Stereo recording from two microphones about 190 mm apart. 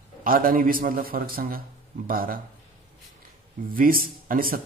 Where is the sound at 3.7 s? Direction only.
50° right (ahead or behind).